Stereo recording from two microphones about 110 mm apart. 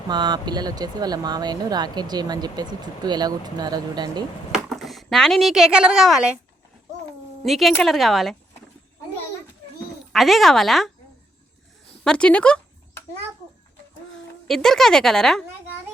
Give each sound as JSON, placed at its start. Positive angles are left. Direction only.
{"t": 0.1, "sound": "speech", "side_deg": -40}
{"t": 4.5, "sound": "a sound", "side_deg": 0}
{"t": 5.0, "sound": "a woman's voice", "side_deg": 5}
{"t": 7.4, "sound": "a woman's voice", "side_deg": 0}
{"t": 10.1, "sound": "a woman's voice", "side_deg": 0}
{"t": 12.0, "sound": "speech", "side_deg": 10}
{"t": 14.4, "sound": "a woman's voice", "side_deg": 5}